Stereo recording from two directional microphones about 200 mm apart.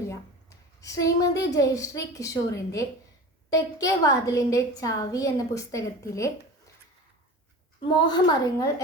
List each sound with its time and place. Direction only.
0.8 s a woman's voice: 15° left (ahead or behind)
7.8 s a woman's voice: 25° left (ahead or behind)